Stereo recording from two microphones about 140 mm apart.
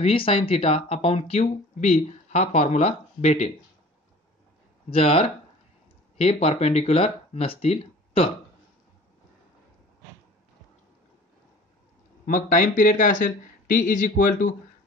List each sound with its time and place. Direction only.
0.0 s speech: 40° left (ahead or behind)
4.8 s speech: 45° left (ahead or behind)
12.3 s speech: 70° left (ahead or behind)